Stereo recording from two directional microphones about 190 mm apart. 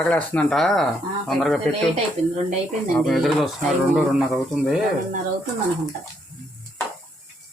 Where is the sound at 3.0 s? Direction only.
Centre (ahead or behind).